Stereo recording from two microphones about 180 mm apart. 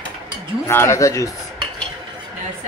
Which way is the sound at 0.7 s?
15° left (ahead or behind).